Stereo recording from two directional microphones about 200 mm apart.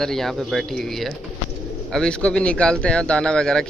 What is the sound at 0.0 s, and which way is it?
Speech, centre (ahead or behind).